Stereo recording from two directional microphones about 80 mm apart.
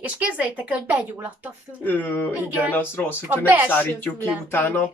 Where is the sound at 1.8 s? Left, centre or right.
Left.